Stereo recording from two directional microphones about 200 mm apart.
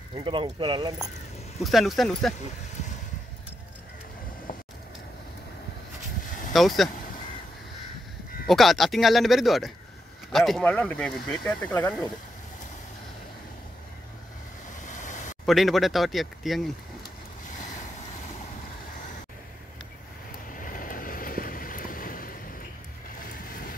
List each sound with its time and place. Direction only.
0.1 s speech: 25° right (ahead or behind)
1.6 s speech: centre (ahead or behind)
6.5 s speech: centre (ahead or behind)
8.5 s speech: centre (ahead or behind)
14.9 s a sound: 40° left (ahead or behind)
15.4 s speech: centre (ahead or behind)
20.5 s vehicle: 45° left (ahead or behind)